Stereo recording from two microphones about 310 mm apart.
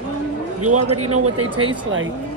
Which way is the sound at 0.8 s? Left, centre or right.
Right.